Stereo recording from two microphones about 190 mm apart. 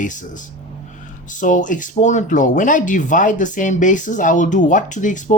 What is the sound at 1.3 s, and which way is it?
Speech, 40° left (ahead or behind).